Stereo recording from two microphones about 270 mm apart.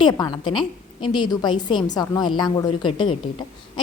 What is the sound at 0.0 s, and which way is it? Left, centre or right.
A woman's voice, centre.